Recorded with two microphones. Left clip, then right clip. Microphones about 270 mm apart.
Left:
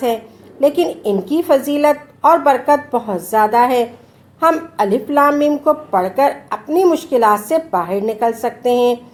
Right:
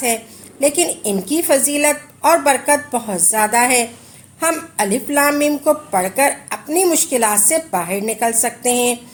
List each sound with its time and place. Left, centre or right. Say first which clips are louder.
0.6 s a woman's voice: left 3 dB; right